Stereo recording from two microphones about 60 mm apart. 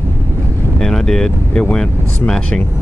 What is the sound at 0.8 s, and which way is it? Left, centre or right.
Speech, centre.